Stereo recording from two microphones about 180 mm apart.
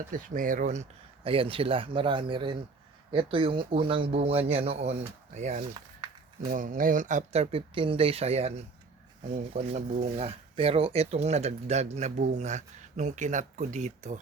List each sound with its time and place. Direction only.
0.1 s speech: 50° right (ahead or behind)
9.6 s speech: 35° right (ahead or behind)